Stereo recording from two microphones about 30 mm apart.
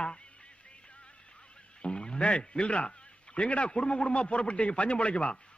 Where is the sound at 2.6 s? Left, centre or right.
Left.